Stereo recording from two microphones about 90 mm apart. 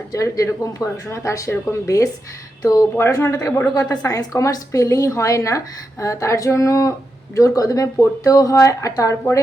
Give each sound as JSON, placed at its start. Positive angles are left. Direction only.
{"t": 0.1, "sound": "a woman's voice", "side_deg": 40}
{"t": 3.8, "sound": "a woman's voice", "side_deg": 40}